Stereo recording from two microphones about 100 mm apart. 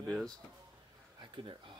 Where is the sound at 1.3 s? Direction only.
55° right (ahead or behind).